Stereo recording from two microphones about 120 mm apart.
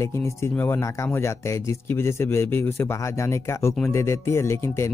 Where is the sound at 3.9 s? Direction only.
20° left (ahead or behind).